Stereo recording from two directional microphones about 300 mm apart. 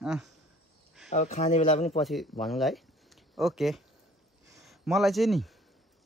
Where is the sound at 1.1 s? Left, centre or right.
Left.